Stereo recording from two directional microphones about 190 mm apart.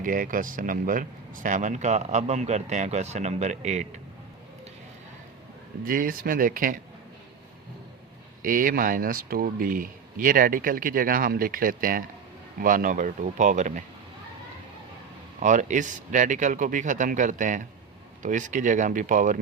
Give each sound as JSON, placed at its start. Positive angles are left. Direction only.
{"t": 0.0, "sound": "speech", "side_deg": -45}
{"t": 5.8, "sound": "speech", "side_deg": -45}
{"t": 8.4, "sound": "speech", "side_deg": -45}
{"t": 15.4, "sound": "speech", "side_deg": -40}